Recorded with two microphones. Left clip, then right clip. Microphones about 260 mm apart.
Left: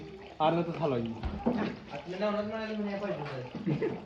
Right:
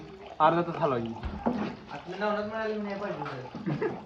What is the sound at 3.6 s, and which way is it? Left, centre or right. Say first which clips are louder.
Speech: right 1 dB; centre.